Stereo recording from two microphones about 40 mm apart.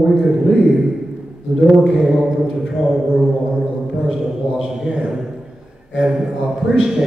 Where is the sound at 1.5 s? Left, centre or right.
Right.